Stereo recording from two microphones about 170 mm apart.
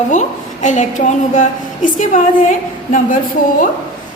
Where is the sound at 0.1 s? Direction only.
45° left (ahead or behind).